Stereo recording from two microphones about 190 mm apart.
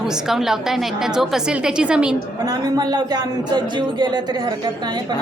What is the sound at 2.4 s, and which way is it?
A man's voice, 20° right (ahead or behind).